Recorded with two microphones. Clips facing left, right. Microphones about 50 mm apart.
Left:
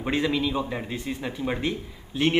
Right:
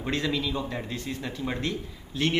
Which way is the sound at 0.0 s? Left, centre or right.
Centre.